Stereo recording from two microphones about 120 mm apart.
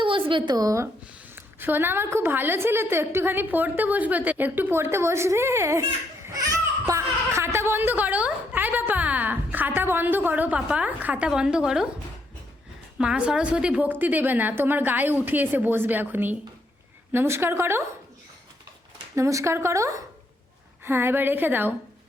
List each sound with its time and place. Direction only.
0.0 s a woman's voice: 45° right (ahead or behind); by 0.9 s 30° right (ahead or behind)
1.5 s a woman's voice: 15° right (ahead or behind)
6.2 s a sound: 30° right (ahead or behind); by 11.9 s 5° right (ahead or behind)
13.0 s a woman's voice: 10° right (ahead or behind)
19.1 s a woman's voice: 25° right (ahead or behind)